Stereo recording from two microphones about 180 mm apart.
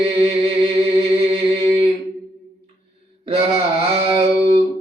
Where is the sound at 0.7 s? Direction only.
35° right (ahead or behind).